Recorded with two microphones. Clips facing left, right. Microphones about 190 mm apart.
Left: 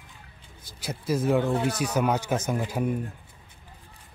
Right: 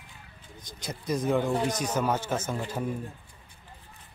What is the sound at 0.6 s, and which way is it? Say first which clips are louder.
Speech: left 3 dB; 5° left (ahead or behind).